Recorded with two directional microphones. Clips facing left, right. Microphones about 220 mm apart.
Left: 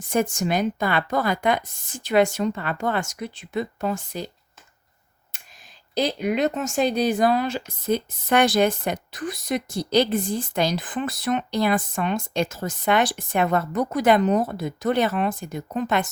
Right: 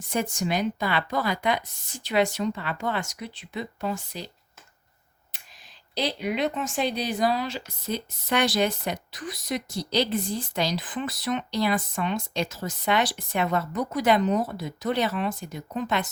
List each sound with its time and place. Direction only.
0.0 s speech: 50° left (ahead or behind)
5.9 s speech: 45° left (ahead or behind)